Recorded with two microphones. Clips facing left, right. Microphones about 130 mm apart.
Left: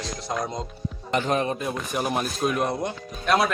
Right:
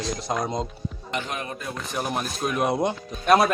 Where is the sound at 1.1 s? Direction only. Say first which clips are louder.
Left 8 dB; 40° left (ahead or behind).